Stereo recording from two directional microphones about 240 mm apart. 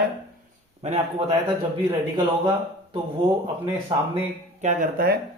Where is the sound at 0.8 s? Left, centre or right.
Right.